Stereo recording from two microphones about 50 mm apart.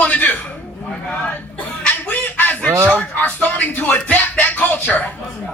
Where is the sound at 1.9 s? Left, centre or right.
Left.